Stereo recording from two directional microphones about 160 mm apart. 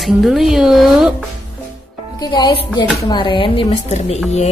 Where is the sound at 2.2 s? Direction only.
25° left (ahead or behind).